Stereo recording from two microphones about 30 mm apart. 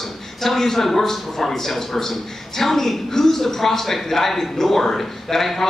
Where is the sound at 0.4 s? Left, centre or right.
Centre.